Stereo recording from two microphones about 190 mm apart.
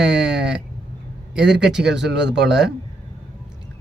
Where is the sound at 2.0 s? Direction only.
65° right (ahead or behind).